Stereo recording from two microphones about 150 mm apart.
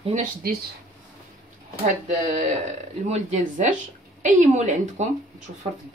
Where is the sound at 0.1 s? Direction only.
70° right (ahead or behind).